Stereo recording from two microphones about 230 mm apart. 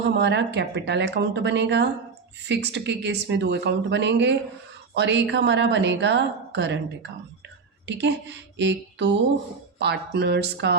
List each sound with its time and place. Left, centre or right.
0.0 s speech: right
7.9 s speech: right